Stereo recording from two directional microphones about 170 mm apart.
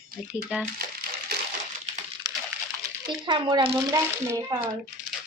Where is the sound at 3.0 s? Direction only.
25° right (ahead or behind).